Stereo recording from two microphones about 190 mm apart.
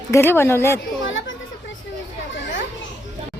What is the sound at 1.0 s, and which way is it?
Chatter, 80° left.